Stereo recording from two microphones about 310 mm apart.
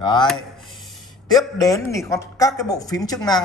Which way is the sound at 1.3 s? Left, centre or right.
Centre.